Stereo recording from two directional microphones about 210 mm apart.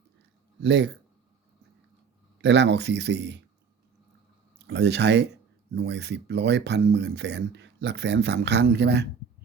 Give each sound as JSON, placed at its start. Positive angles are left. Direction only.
{"t": 0.6, "sound": "speech", "side_deg": -55}
{"t": 2.4, "sound": "speech", "side_deg": -55}
{"t": 4.6, "sound": "speech", "side_deg": -55}